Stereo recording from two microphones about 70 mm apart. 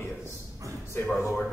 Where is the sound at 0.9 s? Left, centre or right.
Left.